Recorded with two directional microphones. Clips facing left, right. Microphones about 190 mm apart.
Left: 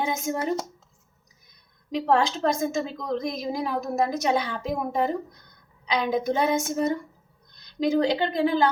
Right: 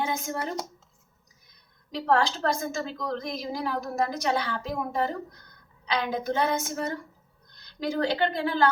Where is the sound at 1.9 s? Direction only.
20° left (ahead or behind).